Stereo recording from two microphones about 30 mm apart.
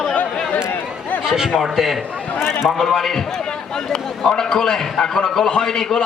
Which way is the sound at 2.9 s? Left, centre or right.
Centre.